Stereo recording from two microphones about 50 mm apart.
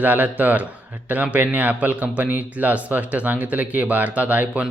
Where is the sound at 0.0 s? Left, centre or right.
Right.